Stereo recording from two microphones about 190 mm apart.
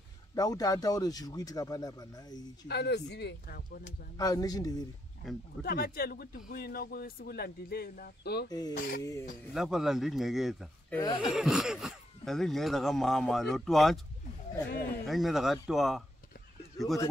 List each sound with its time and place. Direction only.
0.3 s speech: 20° left (ahead or behind)
2.7 s speech: 60° left (ahead or behind)
4.2 s speech: 20° left (ahead or behind)
5.2 s speech: centre (ahead or behind)
5.6 s speech: 55° left (ahead or behind)
8.5 s speech: 20° left (ahead or behind)
9.5 s speech: centre (ahead or behind)
14.7 s speech: 55° left (ahead or behind)
15.0 s speech: centre (ahead or behind)